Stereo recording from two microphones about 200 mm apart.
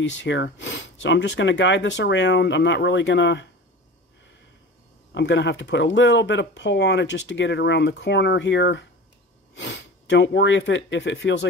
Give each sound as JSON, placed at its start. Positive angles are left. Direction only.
{"t": 0.0, "sound": "speech", "side_deg": 65}
{"t": 5.1, "sound": "speech", "side_deg": 60}